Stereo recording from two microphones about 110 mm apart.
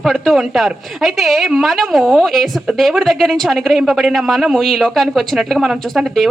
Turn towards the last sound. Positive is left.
turn(degrees=0)  # may be behind; listen again after turning